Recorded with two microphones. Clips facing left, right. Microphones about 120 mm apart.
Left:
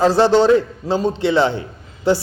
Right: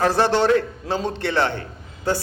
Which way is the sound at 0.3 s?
15° left (ahead or behind).